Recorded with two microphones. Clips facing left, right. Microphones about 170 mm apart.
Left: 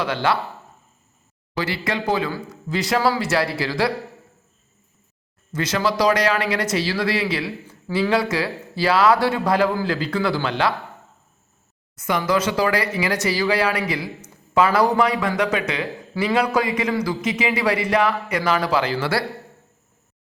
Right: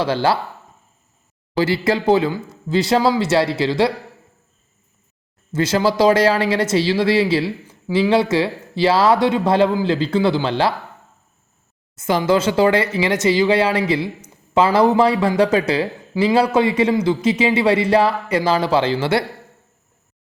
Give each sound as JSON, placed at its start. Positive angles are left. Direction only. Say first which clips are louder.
{"t": 0.0, "sound": "speech", "louder": "right 4 dB", "side_deg": -30}
{"t": 1.5, "sound": "a man's voice", "louder": "right 7 dB", "side_deg": -25}
{"t": 5.5, "sound": "a man's voice", "louder": "right 5 dB", "side_deg": -30}
{"t": 7.7, "sound": "a sound", "louder": "right 4 dB", "side_deg": -15}
{"t": 8.1, "sound": "a man's voice", "louder": "right 5 dB", "side_deg": -25}
{"t": 11.9, "sound": "a man's voice", "louder": "right 4 dB", "side_deg": -25}